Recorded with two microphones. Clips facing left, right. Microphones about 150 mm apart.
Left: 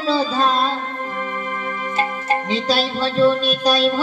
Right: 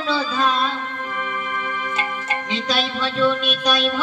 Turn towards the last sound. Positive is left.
turn(degrees=35)  # may be behind; listen again after turning